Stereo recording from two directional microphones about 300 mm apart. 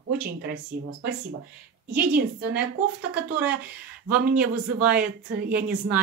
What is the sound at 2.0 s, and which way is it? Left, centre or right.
Speech, right.